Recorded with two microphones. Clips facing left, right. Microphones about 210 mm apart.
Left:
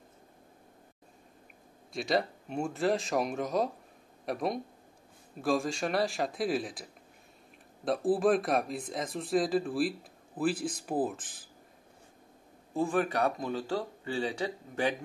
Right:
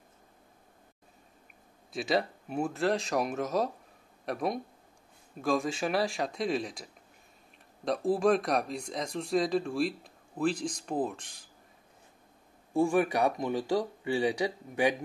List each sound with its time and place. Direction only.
1.9 s speech: centre (ahead or behind)
12.7 s speech: 15° right (ahead or behind)